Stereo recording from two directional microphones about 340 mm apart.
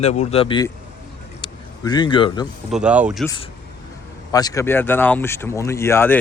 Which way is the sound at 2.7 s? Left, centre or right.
Centre.